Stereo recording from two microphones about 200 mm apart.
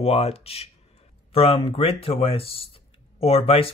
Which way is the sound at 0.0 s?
30° left (ahead or behind).